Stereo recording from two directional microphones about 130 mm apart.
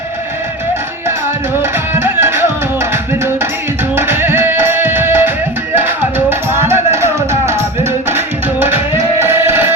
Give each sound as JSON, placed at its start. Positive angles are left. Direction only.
{"t": 2.0, "sound": "music", "side_deg": -20}
{"t": 3.9, "sound": "music", "side_deg": -15}